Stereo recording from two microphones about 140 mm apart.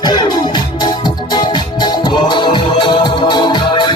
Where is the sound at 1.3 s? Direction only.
30° left (ahead or behind).